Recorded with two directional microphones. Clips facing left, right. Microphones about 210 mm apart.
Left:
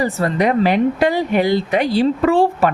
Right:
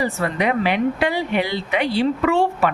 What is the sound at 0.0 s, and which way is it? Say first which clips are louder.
A woman's voice: left 4 dB; 40° left (ahead or behind).